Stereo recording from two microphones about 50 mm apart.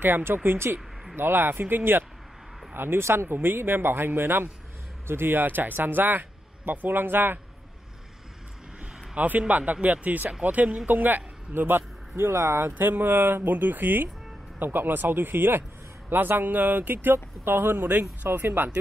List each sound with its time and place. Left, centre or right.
0.0 s speech: right
9.1 s a man's voice: right
12.2 s speech: right
12.7 s speech: right